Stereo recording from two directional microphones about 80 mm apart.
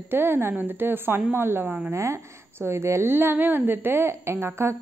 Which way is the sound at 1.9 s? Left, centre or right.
Right.